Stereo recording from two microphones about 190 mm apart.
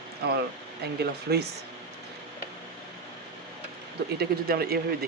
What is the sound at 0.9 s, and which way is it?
Speech, 60° right (ahead or behind).